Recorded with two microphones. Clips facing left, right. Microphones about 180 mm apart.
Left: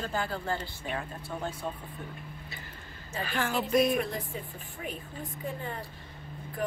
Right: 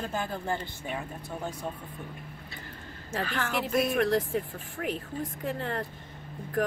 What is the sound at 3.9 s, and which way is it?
Speech, 90° right.